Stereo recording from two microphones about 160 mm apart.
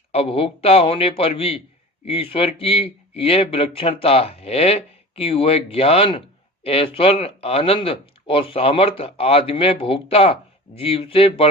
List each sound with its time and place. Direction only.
0.1 s speech: 40° left (ahead or behind)